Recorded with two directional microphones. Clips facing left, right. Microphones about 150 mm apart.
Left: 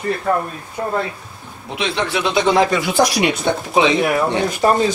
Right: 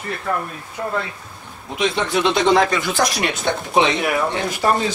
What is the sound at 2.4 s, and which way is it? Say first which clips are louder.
Speech: left 3 dB; 5° left (ahead or behind).